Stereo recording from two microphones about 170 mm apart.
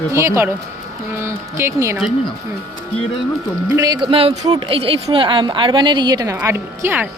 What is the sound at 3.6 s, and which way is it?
Speech, 20° right (ahead or behind).